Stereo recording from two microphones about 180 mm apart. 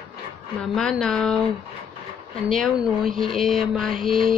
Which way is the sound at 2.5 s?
Centre (ahead or behind).